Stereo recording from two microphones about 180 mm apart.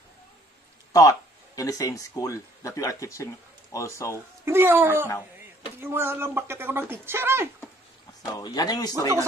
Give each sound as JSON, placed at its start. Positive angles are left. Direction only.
{"t": 0.9, "sound": "speech", "side_deg": 20}
{"t": 4.5, "sound": "speech", "side_deg": -10}
{"t": 8.3, "sound": "speech", "side_deg": 20}